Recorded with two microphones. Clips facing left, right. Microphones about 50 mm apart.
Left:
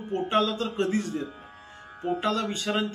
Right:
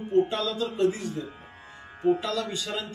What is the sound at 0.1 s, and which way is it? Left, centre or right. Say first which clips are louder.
Speech: right 1 dB; left.